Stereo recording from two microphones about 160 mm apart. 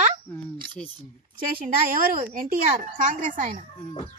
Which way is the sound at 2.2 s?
60° right (ahead or behind).